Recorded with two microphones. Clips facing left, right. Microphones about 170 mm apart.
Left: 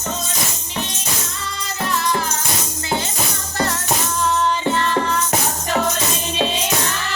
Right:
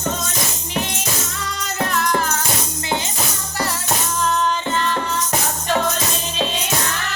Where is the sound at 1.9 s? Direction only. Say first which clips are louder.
Even; 50° right (ahead or behind).